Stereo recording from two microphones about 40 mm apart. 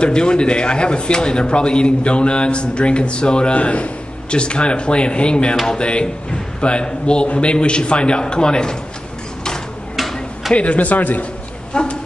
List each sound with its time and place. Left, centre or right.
0.0 s speech: left
10.5 s speech: left
11.7 s a sound: left